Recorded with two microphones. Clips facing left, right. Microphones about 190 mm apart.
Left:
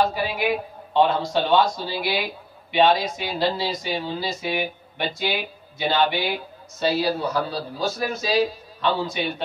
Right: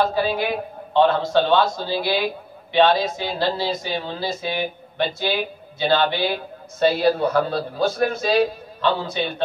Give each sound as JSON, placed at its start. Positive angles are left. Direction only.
{"t": 0.0, "sound": "speech", "side_deg": 15}
{"t": 3.3, "sound": "speech", "side_deg": 15}
{"t": 6.8, "sound": "a man's voice", "side_deg": -55}
{"t": 8.8, "sound": "speech", "side_deg": 10}